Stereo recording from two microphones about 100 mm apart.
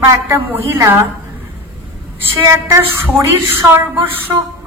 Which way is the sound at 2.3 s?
25° right (ahead or behind).